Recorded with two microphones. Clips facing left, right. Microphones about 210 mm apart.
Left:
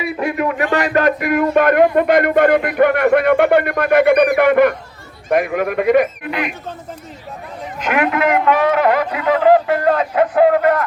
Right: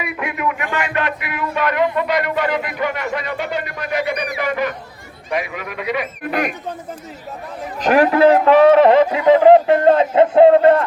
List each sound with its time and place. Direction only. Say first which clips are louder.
0.0 s speech: left 4 dB; 35° left (ahead or behind)
7.8 s a man's voice: right 5 dB; 35° right (ahead or behind)